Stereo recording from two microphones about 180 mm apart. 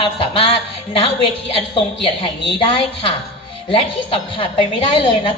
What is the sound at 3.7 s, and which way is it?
Speech, 30° left (ahead or behind).